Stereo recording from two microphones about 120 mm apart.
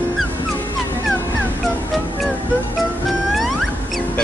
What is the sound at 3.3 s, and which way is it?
Music, centre (ahead or behind).